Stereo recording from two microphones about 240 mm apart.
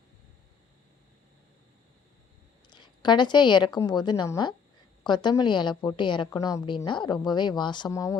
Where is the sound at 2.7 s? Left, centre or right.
Centre.